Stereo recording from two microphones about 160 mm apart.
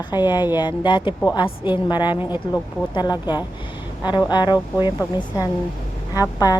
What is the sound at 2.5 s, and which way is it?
A woman's voice, 25° left (ahead or behind).